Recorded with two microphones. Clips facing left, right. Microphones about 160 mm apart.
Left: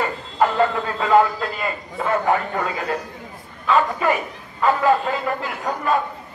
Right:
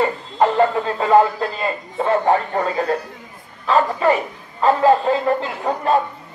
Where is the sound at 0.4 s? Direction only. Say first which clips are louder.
Right 3 dB; 30° right (ahead or behind).